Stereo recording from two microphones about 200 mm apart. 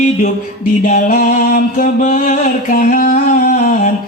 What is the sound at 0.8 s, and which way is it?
Music, 40° left (ahead or behind).